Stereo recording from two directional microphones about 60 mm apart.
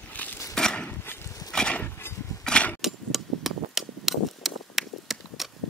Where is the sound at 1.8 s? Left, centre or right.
Left.